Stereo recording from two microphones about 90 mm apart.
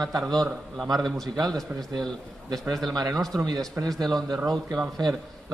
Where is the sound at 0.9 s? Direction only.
Centre (ahead or behind).